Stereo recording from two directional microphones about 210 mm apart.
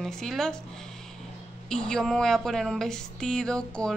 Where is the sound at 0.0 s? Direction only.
Centre (ahead or behind).